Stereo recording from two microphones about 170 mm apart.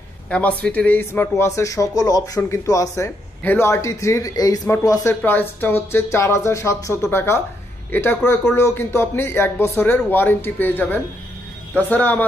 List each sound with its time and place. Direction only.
0.3 s a man's voice: 10° left (ahead or behind)